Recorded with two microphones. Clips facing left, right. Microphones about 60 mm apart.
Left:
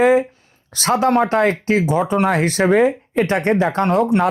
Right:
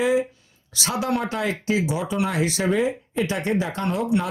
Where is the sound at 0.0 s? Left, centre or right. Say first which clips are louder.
Left 7 dB; left.